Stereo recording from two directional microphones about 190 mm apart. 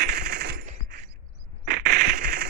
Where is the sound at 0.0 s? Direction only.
55° right (ahead or behind).